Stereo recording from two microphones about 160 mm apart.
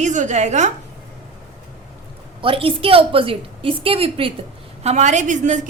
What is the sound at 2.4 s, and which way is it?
A woman's voice, 35° right (ahead or behind).